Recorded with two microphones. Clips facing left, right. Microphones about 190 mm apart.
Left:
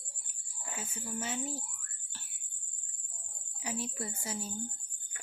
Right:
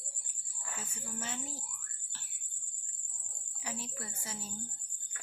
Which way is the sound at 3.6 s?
15° left (ahead or behind).